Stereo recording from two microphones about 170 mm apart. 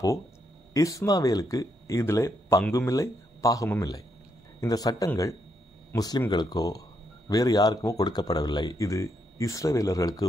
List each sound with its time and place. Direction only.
0.7 s speech: 20° left (ahead or behind)